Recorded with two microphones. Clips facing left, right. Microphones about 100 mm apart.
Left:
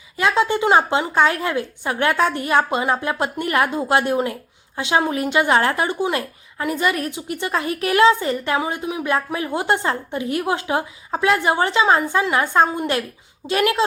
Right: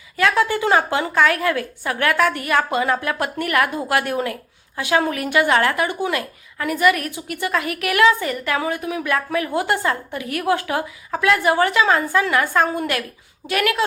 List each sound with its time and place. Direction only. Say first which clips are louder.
0.2 s speech: even; 20° left (ahead or behind)